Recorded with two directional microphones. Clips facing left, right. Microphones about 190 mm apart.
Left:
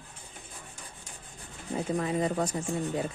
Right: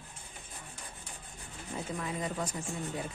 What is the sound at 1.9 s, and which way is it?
Speech, 40° left (ahead or behind).